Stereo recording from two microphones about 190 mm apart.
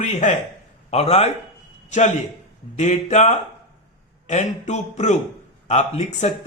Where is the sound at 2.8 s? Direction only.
40° left (ahead or behind).